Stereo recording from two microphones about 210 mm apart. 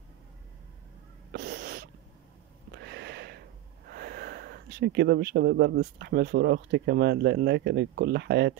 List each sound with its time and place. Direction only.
1.3 s sneeze: 50° right (ahead or behind)
2.7 s wheeze: 55° right (ahead or behind)
3.9 s speech: 45° right (ahead or behind)